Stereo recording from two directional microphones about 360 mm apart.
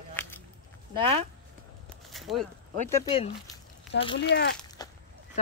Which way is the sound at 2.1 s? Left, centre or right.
Centre.